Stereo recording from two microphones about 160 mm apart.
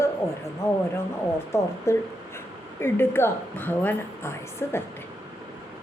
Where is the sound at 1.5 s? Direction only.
20° left (ahead or behind).